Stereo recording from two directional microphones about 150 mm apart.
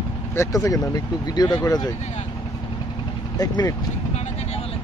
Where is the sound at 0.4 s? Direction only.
20° left (ahead or behind).